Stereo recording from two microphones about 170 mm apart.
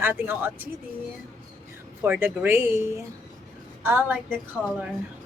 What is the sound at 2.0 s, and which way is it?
Speech, 10° right (ahead or behind).